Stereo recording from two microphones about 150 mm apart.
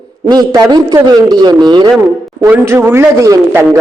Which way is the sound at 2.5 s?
15° right (ahead or behind).